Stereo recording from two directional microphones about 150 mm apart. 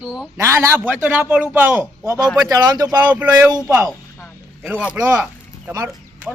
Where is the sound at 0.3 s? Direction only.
15° right (ahead or behind).